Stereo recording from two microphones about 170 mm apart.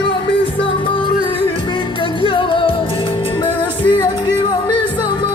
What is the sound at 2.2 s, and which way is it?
Music, 30° left (ahead or behind).